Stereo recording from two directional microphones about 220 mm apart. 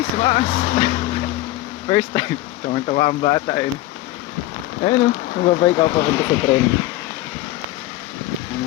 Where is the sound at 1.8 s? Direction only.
25° left (ahead or behind).